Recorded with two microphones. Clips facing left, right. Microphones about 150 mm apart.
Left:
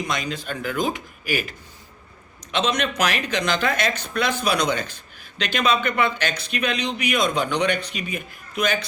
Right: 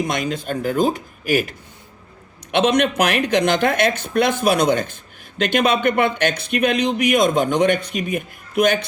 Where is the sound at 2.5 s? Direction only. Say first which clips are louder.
Right 7 dB; 55° right (ahead or behind).